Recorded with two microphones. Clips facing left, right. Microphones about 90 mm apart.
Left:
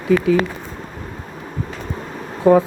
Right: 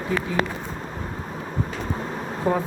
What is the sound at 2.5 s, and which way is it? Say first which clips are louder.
Speech: left 11 dB; 90° left.